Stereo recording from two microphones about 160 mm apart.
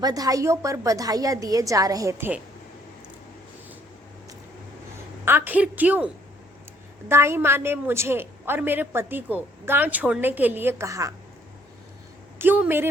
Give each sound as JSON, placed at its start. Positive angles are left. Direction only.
{"t": 0.0, "sound": "a woman's voice", "side_deg": -20}
{"t": 5.2, "sound": "a woman's voice", "side_deg": -10}
{"t": 7.1, "sound": "a woman's voice", "side_deg": -15}
{"t": 12.4, "sound": "a woman's voice", "side_deg": -10}